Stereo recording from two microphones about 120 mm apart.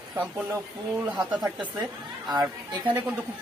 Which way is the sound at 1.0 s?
10° right (ahead or behind).